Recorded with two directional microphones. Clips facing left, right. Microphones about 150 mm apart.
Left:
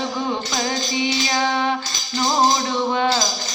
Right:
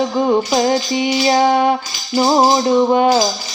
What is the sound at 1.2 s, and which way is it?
Music, 35° right (ahead or behind).